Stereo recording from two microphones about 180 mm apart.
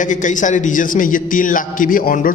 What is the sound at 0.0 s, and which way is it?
A man's voice, 45° left (ahead or behind).